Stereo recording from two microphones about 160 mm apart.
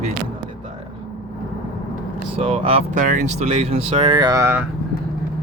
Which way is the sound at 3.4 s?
35° right (ahead or behind).